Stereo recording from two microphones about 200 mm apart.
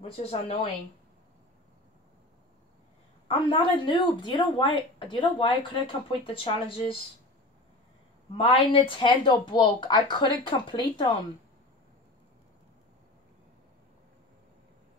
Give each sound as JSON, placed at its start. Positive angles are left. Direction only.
{"t": 0.0, "sound": "a woman's voice", "side_deg": 30}
{"t": 3.3, "sound": "a woman's voice", "side_deg": 25}
{"t": 8.4, "sound": "a woman's voice", "side_deg": 25}